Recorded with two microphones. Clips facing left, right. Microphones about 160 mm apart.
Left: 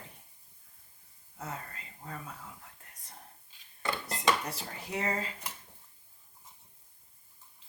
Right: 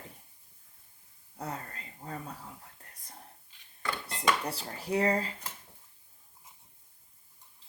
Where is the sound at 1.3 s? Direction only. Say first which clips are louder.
Right 3 dB; 35° right (ahead or behind).